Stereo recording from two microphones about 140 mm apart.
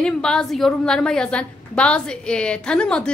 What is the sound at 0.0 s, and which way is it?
A woman's voice, 5° left (ahead or behind).